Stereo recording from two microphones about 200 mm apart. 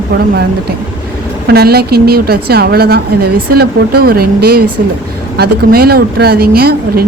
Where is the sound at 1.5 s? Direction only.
50° right (ahead or behind).